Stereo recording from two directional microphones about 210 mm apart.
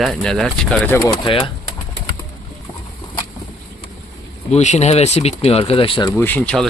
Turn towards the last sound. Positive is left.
turn(degrees=5)  # may be behind; listen again after turning